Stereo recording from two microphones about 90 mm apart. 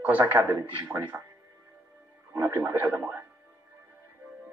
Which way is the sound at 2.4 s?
30° right (ahead or behind).